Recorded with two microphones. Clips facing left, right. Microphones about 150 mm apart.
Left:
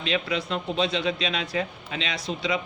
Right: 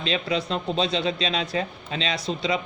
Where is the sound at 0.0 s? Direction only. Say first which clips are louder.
Right 1 dB; 30° right (ahead or behind).